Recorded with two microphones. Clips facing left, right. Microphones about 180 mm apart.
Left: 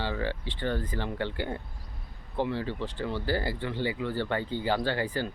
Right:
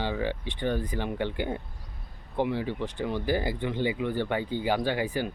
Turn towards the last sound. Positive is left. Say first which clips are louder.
# right 1 dB
turn(degrees=-10)  # may be behind; listen again after turning